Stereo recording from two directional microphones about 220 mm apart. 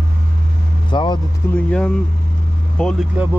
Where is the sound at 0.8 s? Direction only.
20° left (ahead or behind).